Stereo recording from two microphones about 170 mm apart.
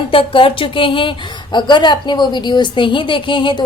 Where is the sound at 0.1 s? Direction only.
30° left (ahead or behind).